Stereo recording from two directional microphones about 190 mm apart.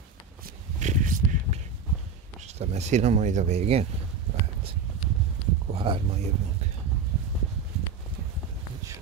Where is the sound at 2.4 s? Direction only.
35° right (ahead or behind).